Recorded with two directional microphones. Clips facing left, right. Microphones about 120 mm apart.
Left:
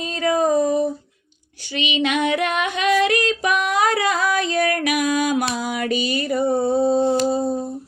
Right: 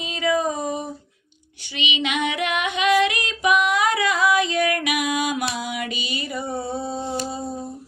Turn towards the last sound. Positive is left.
turn(degrees=40)  # may be behind; listen again after turning